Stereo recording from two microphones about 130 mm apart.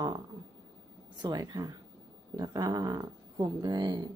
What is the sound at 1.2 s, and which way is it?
A woman's voice, 30° right (ahead or behind).